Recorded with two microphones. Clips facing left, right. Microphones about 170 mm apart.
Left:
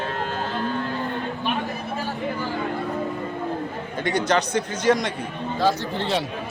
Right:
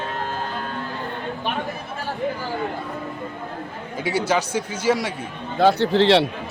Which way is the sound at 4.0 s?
5° right (ahead or behind).